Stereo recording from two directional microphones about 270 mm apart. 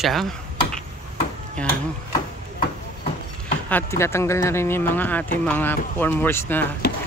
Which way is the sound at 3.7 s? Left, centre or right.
Centre.